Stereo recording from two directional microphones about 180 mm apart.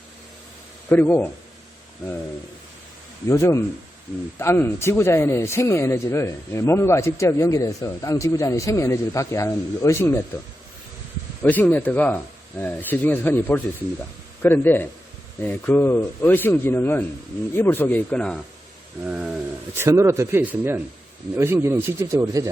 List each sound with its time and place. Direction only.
0.9 s speech: 10° left (ahead or behind)
3.2 s speech: 15° left (ahead or behind)
11.4 s speech: 10° left (ahead or behind)
19.0 s speech: 5° right (ahead or behind)